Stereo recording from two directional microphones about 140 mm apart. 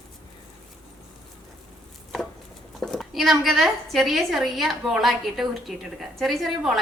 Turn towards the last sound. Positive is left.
turn(degrees=0)  # may be behind; listen again after turning